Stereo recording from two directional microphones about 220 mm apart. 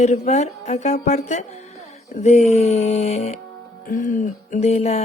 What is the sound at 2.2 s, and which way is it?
A woman's voice, 30° left (ahead or behind).